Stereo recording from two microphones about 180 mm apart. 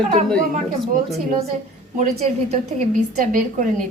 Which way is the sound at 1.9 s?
50° right (ahead or behind).